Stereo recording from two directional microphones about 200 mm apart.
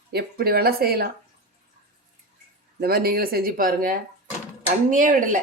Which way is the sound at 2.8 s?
50° right (ahead or behind).